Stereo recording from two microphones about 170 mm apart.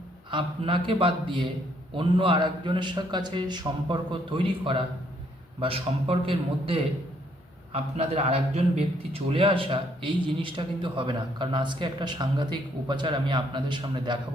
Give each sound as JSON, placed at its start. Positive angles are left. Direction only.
{"t": 0.3, "sound": "a man's voice", "side_deg": -30}